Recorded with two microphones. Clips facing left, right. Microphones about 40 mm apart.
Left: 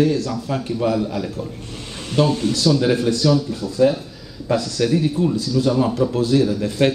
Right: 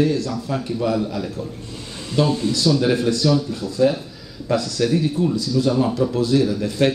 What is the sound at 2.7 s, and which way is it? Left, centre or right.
Speech, centre.